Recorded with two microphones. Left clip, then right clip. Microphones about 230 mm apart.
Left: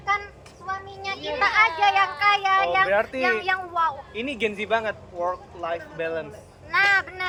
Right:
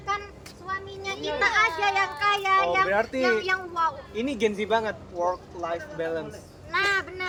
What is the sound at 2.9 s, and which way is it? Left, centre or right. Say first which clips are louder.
Speech: left 3 dB; right.